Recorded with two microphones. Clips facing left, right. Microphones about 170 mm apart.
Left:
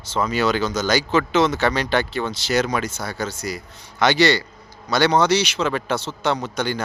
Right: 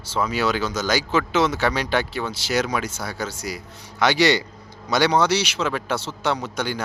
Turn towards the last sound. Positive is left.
turn(degrees=-10)  # may be behind; listen again after turning